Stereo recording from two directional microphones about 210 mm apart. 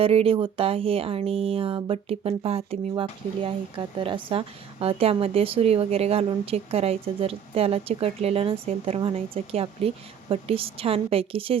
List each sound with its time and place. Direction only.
0.0 s speech: 30° right (ahead or behind)